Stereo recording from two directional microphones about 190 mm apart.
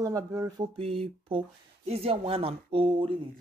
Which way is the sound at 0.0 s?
20° right (ahead or behind).